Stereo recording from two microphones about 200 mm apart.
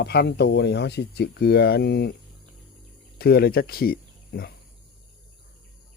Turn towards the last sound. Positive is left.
turn(degrees=50)  # may be behind; listen again after turning